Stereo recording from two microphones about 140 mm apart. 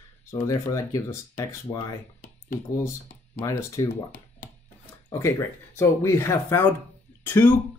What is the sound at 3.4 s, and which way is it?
Speech, 25° left (ahead or behind).